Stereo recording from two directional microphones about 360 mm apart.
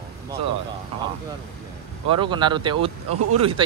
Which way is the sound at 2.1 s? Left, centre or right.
Centre.